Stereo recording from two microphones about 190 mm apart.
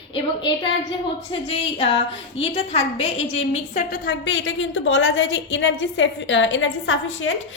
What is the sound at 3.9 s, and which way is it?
A woman's voice, 60° left (ahead or behind).